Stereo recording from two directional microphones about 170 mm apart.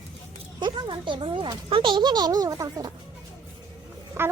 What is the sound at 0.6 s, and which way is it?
Speech, 30° right (ahead or behind).